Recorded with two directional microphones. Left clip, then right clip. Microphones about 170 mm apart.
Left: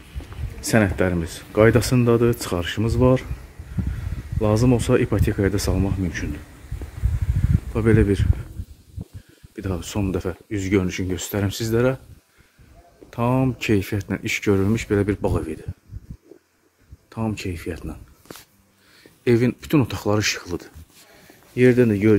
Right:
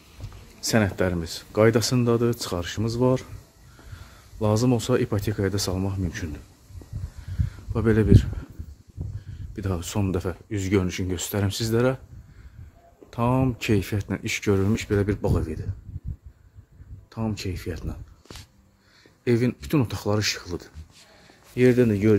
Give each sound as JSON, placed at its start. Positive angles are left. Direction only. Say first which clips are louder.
{"t": 0.6, "sound": "speech", "louder": "left 3 dB", "side_deg": -5}
{"t": 4.4, "sound": "speech", "louder": "left 3 dB", "side_deg": -15}
{"t": 7.7, "sound": "speech", "louder": "left 2 dB", "side_deg": -15}
{"t": 9.6, "sound": "speech", "louder": "left 2 dB", "side_deg": -25}
{"t": 13.1, "sound": "speech", "louder": "left 2 dB", "side_deg": -10}
{"t": 17.1, "sound": "speech", "louder": "left 3 dB", "side_deg": 10}
{"t": 19.2, "sound": "speech", "louder": "left 4 dB", "side_deg": 20}
{"t": 21.5, "sound": "speech", "louder": "left 3 dB", "side_deg": 0}